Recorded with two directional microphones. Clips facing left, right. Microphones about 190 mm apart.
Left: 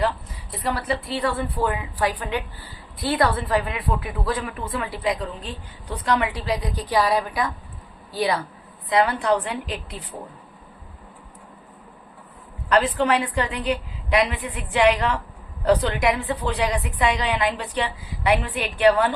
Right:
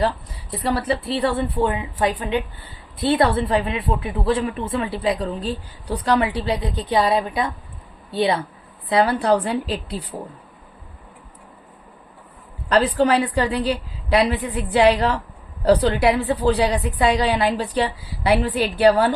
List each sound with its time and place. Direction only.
0.6 s a woman's voice: 30° right (ahead or behind)
12.6 s a woman's voice: 35° right (ahead or behind)